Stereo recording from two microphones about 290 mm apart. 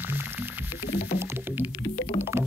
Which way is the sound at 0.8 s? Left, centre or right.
Left.